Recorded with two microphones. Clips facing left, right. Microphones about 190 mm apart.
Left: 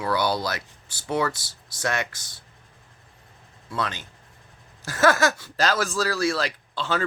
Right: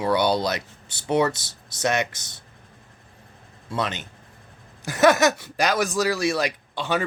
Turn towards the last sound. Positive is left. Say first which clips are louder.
# right 2 dB
turn(degrees=-15)  # may be behind; listen again after turning